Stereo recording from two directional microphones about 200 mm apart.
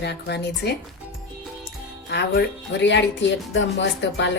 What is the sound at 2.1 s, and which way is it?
Speech, 55° left (ahead or behind).